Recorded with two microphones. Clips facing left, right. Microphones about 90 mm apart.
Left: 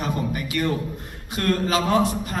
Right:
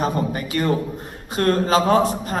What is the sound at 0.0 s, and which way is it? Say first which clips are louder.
A man's voice: right 4 dB; 35° right (ahead or behind).